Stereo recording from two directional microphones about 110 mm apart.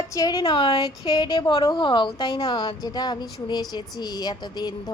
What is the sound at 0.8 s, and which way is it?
A woman's voice, 35° left (ahead or behind).